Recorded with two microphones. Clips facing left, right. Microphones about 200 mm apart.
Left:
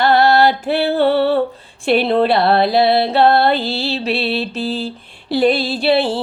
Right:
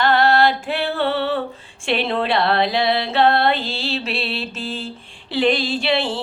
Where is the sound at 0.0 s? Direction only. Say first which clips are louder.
Left 4 dB; 40° left (ahead or behind).